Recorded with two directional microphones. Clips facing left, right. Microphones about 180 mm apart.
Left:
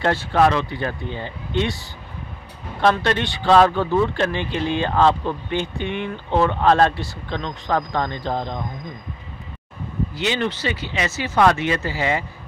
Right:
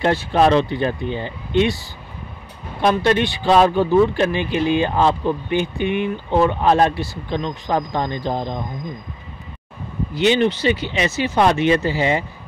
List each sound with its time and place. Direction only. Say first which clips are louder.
0.0 s speech: right 2 dB; 15° right (ahead or behind)
2.8 s speech: right 2 dB; 15° right (ahead or behind)
10.1 s speech: right 8 dB; 20° right (ahead or behind)